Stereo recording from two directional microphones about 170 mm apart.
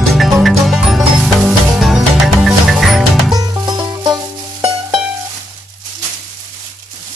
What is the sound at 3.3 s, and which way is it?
Music, 20° right (ahead or behind).